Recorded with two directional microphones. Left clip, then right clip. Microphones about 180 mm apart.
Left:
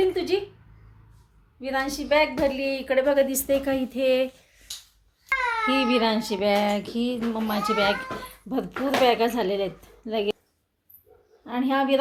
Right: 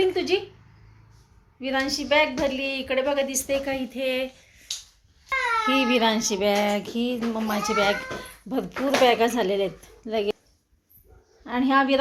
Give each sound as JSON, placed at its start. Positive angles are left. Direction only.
{"t": 0.0, "sound": "a sound", "side_deg": -15}
{"t": 1.6, "sound": "a child's voice", "side_deg": -10}
{"t": 2.4, "sound": "a woman's voice", "side_deg": 15}
{"t": 5.6, "sound": "a child's voice", "side_deg": 5}
{"t": 11.4, "sound": "a woman's voice", "side_deg": -10}